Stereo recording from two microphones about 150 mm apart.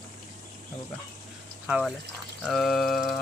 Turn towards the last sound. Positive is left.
turn(degrees=0)  # may be behind; listen again after turning